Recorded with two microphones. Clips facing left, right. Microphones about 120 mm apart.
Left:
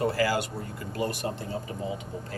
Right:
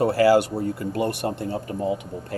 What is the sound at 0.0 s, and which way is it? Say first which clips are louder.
Speech: right 9 dB; 60° right (ahead or behind).